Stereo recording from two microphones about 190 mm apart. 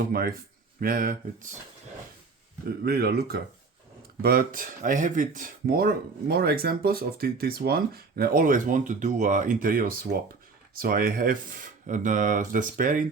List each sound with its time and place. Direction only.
0.1 s speech: 50° right (ahead or behind)
2.6 s speech: 55° right (ahead or behind)